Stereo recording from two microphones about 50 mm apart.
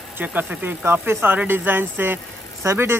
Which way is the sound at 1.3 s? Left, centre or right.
Right.